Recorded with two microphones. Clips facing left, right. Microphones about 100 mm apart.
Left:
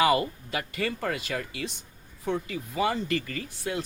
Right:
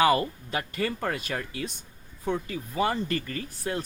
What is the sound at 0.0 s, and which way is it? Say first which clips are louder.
Speech: right 1 dB; 35° right (ahead or behind).